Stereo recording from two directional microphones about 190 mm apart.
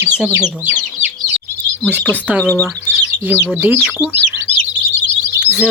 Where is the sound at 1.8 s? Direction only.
Centre (ahead or behind).